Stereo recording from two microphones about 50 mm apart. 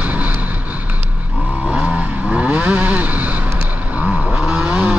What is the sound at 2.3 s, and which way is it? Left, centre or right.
Vehicle, right.